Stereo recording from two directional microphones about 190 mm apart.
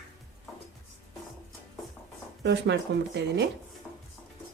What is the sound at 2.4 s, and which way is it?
Speech, 65° right (ahead or behind).